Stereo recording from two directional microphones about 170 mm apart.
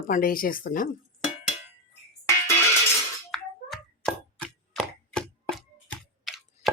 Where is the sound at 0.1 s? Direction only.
55° left (ahead or behind).